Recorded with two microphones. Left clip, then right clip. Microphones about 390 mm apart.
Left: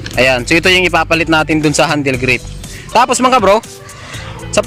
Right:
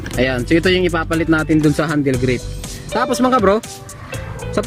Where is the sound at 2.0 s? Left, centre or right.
Left.